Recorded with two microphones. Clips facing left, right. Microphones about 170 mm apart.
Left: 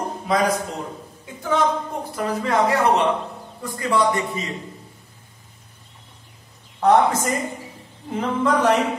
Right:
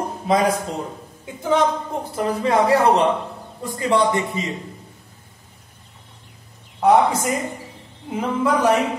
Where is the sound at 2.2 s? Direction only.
30° right (ahead or behind).